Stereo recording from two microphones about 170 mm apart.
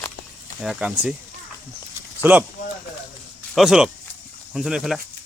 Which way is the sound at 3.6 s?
5° right (ahead or behind).